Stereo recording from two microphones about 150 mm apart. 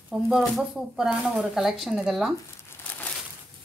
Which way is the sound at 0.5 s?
5° right (ahead or behind).